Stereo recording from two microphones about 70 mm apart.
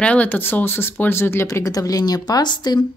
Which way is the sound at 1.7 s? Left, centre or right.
Left.